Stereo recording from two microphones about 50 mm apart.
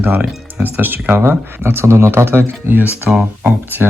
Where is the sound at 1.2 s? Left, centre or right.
Right.